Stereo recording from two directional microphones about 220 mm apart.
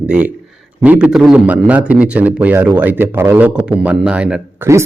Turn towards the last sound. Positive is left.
turn(degrees=-10)  # may be behind; listen again after turning